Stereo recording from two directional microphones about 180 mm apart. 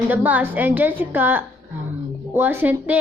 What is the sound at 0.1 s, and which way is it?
Speech, 10° right (ahead or behind).